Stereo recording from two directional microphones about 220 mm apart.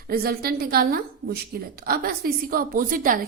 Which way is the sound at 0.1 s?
45° right (ahead or behind).